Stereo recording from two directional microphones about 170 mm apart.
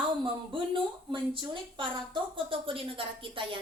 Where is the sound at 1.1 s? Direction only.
30° right (ahead or behind).